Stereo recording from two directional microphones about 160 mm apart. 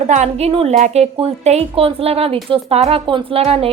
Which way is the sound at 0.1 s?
45° right (ahead or behind).